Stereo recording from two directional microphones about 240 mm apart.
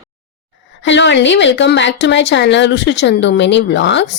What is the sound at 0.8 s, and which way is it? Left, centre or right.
Speech, left.